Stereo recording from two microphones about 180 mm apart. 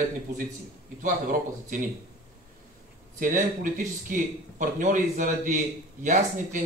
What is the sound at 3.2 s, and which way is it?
Speech, 50° right (ahead or behind).